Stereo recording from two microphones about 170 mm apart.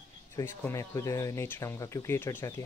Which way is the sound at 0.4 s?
15° left (ahead or behind).